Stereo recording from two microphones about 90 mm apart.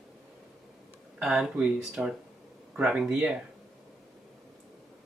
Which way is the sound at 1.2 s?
5° right (ahead or behind).